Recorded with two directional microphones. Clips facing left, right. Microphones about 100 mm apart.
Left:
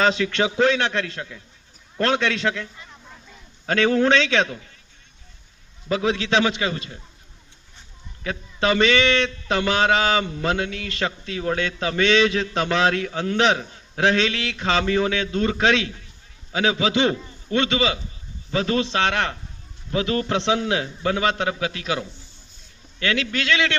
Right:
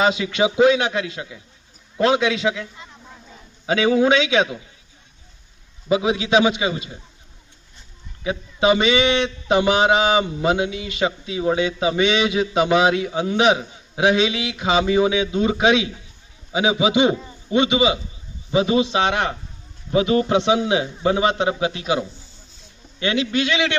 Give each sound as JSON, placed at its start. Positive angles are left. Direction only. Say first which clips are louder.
{"t": 0.0, "sound": "a man's voice", "louder": "right 2 dB", "side_deg": -10}
{"t": 3.7, "sound": "a man's voice", "louder": "right 2 dB", "side_deg": -10}
{"t": 5.9, "sound": "a man's voice", "louder": "right 3 dB", "side_deg": -15}
{"t": 8.2, "sound": "a man's voice", "louder": "right 4 dB", "side_deg": -15}